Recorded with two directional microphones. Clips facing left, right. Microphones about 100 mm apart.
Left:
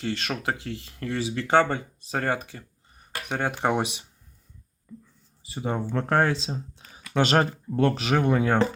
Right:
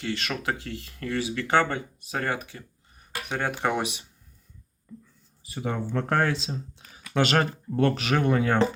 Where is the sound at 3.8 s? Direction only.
25° left (ahead or behind).